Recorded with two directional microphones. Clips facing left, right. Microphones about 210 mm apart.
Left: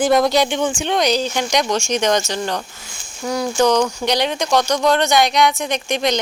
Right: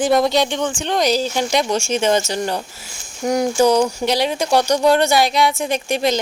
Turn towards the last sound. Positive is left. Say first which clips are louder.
# right 1 dB
turn(degrees=-5)  # may be behind; listen again after turning